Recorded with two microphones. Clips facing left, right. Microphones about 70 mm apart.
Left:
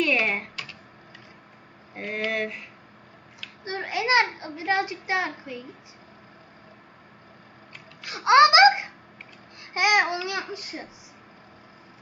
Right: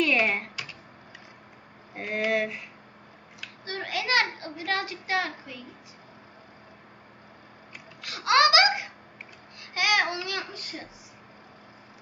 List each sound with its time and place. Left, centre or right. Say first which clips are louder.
0.0 s computer keyboard: even; centre
2.0 s speech: right 2 dB; centre
3.6 s a child's voice: left 4 dB; left
8.0 s a child's voice: left 5 dB; left